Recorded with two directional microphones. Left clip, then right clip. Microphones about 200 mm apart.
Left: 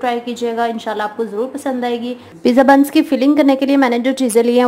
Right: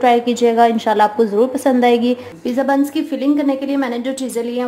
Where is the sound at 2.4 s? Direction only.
30° left (ahead or behind).